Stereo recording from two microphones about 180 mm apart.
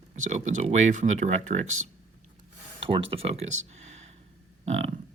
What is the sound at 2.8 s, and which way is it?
Speech, 30° right (ahead or behind).